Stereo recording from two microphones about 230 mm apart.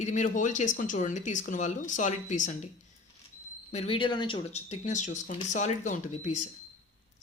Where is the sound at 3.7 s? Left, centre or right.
Left.